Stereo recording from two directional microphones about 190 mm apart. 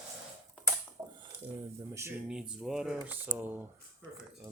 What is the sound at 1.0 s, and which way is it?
Dishes, 15° right (ahead or behind).